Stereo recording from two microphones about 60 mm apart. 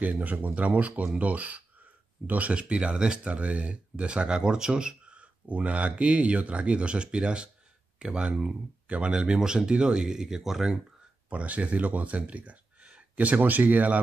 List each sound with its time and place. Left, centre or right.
0.0 s speech: right; by 10.8 s centre
11.2 s speech: right